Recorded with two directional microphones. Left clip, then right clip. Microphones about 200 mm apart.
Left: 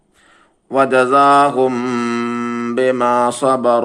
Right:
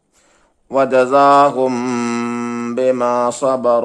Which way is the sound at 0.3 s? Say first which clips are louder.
Even; 30° right (ahead or behind).